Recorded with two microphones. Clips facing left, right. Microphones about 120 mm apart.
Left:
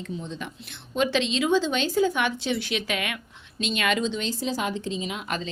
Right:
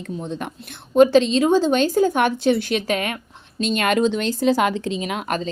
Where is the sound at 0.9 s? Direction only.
45° right (ahead or behind).